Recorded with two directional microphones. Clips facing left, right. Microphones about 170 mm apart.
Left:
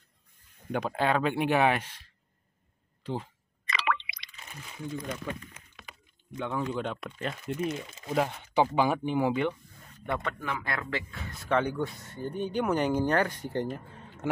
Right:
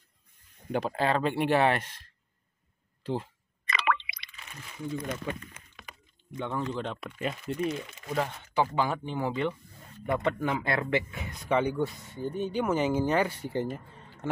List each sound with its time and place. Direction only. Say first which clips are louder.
0.7 s speech: even; centre (ahead or behind)
3.6 s drip: right 2 dB; 50° right (ahead or behind)
4.9 s speech: right 2 dB; 55° right (ahead or behind)
6.3 s speech: left 1 dB; centre (ahead or behind)
8.2 s speech: left 2 dB; 15° left (ahead or behind)
10.2 s speech: right 6 dB; 25° right (ahead or behind)
11.5 s speech: right 1 dB; 10° right (ahead or behind)
14.2 s a man's voice: left 2 dB; 10° left (ahead or behind)